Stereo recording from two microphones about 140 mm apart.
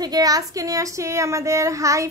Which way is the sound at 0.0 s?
25° right (ahead or behind).